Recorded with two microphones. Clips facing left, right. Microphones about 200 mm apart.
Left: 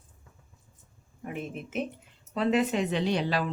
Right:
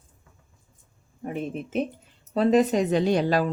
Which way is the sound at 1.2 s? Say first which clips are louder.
Right 6 dB; 35° right (ahead or behind).